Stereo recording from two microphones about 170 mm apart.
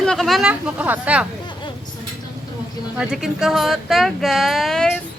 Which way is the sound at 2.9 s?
5° right (ahead or behind).